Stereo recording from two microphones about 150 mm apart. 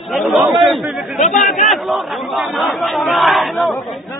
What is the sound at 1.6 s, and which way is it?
Speech, centre (ahead or behind).